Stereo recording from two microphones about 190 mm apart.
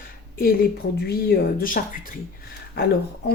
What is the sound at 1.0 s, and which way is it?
Speech, 55° left (ahead or behind).